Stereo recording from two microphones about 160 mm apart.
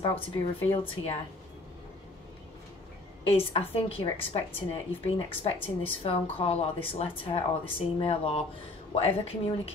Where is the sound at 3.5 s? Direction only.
35° left (ahead or behind).